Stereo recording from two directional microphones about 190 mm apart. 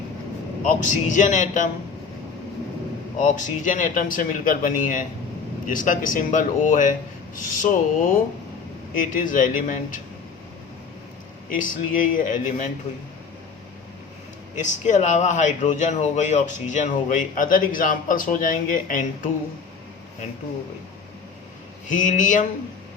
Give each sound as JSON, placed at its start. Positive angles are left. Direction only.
{"t": 0.9, "sound": "speech", "side_deg": 40}
{"t": 3.2, "sound": "speech", "side_deg": 40}
{"t": 11.5, "sound": "speech", "side_deg": 45}
{"t": 14.6, "sound": "speech", "side_deg": 40}
{"t": 21.9, "sound": "speech", "side_deg": 45}